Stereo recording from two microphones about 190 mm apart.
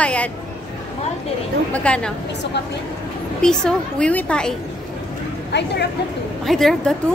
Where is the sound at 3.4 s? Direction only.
5° left (ahead or behind).